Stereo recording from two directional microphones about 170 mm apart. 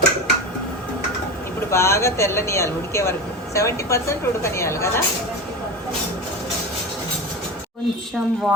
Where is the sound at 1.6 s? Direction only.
15° left (ahead or behind).